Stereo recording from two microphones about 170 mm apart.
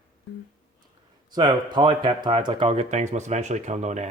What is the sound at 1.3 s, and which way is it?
Speech, 25° right (ahead or behind).